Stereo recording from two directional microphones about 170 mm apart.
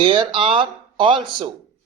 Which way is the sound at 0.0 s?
30° right (ahead or behind).